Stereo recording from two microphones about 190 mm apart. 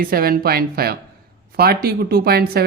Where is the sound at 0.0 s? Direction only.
50° right (ahead or behind).